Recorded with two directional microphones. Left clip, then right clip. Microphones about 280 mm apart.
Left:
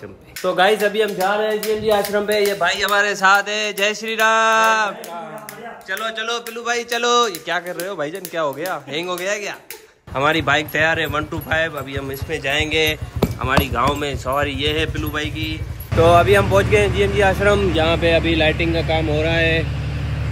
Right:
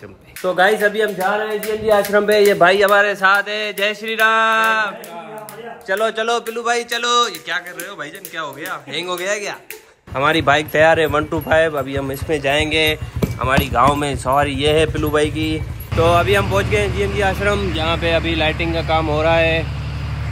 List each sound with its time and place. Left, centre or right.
0.4 s speech: centre
2.1 s a man's voice: centre
2.8 s a man's voice: centre
5.9 s a man's voice: centre